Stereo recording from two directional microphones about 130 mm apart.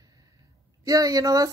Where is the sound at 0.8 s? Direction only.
30° right (ahead or behind).